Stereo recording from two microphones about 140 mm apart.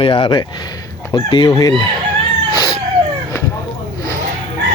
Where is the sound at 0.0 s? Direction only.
35° left (ahead or behind).